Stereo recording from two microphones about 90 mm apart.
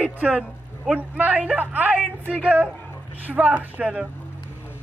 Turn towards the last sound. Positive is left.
turn(degrees=-10)  # may be behind; listen again after turning